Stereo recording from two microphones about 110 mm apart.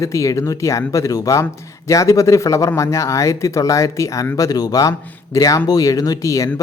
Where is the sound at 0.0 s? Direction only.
30° left (ahead or behind).